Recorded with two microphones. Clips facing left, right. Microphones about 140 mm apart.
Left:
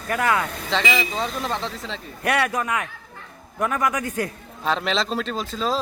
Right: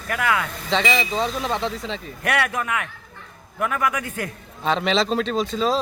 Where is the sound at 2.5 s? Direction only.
30° left (ahead or behind).